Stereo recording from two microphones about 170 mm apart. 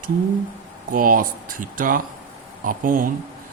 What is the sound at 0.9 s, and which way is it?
Speech, 55° right (ahead or behind).